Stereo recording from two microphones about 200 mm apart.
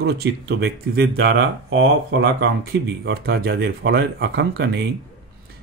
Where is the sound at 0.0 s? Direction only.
55° right (ahead or behind).